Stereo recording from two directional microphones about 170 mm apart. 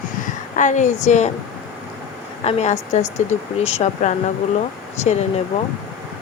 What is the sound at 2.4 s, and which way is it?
Speech, 40° left (ahead or behind).